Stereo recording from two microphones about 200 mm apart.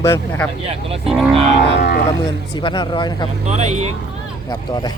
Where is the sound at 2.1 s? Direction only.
20° left (ahead or behind).